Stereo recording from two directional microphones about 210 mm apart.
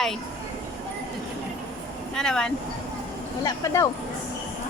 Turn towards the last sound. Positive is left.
turn(degrees=15)  # may be behind; listen again after turning